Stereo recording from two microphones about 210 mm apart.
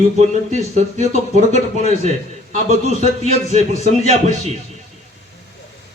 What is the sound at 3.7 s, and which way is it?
Speech, 30° left (ahead or behind).